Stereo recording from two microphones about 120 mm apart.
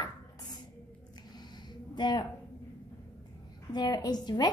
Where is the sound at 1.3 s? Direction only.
35° left (ahead or behind).